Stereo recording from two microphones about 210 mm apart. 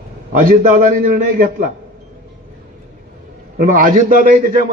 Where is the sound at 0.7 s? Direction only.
40° right (ahead or behind).